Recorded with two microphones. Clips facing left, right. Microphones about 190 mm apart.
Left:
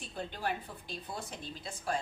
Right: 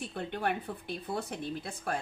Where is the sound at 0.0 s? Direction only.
65° right (ahead or behind).